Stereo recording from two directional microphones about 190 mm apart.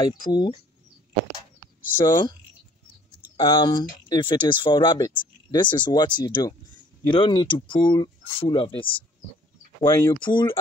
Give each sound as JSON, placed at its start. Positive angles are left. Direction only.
{"t": 0.0, "sound": "speech", "side_deg": 25}
{"t": 2.0, "sound": "speech", "side_deg": 25}
{"t": 3.3, "sound": "speech", "side_deg": 25}
{"t": 10.2, "sound": "speech", "side_deg": 25}